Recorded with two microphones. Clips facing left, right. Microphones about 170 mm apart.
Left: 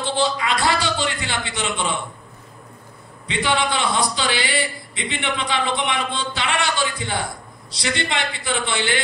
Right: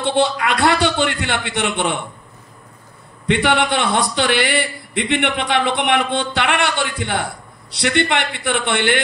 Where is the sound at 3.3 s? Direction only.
60° right (ahead or behind).